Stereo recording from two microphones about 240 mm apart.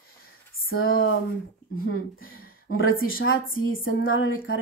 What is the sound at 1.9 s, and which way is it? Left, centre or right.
Speech, left.